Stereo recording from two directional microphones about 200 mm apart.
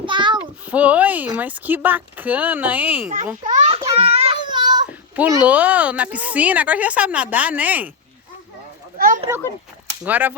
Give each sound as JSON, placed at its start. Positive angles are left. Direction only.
{"t": 0.0, "sound": "child singing", "side_deg": -25}
{"t": 0.7, "sound": "a woman's voice", "side_deg": -5}
{"t": 3.4, "sound": "a sound", "side_deg": -35}
{"t": 3.9, "sound": "child singing", "side_deg": -30}
{"t": 4.9, "sound": "a sound", "side_deg": -5}
{"t": 5.4, "sound": "a woman's voice", "side_deg": -5}
{"t": 9.0, "sound": "children playing", "side_deg": -45}
{"t": 10.0, "sound": "a woman's voice", "side_deg": -10}